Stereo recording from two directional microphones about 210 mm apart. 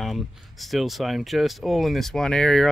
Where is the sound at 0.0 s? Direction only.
Centre (ahead or behind).